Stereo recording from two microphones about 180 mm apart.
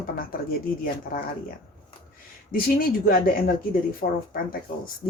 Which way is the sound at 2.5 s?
55° left (ahead or behind).